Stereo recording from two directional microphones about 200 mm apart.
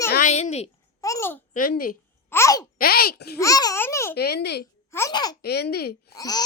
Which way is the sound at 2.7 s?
50° left (ahead or behind).